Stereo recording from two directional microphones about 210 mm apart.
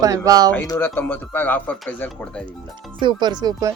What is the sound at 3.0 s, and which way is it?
Speech, 20° right (ahead or behind).